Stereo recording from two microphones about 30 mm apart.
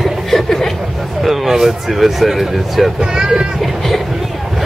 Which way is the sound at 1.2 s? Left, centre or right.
Centre.